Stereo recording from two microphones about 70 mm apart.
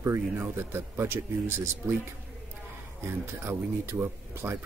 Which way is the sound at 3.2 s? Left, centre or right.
Right.